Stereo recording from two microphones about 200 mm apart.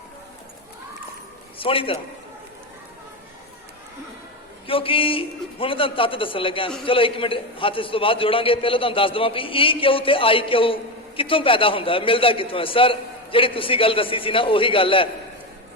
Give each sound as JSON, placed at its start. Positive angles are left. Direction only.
{"t": 1.5, "sound": "a man's voice", "side_deg": 25}
{"t": 4.6, "sound": "a man's voice", "side_deg": 25}